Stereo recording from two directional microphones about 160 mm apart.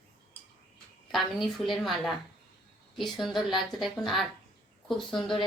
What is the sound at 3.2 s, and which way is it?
A woman's voice, centre (ahead or behind).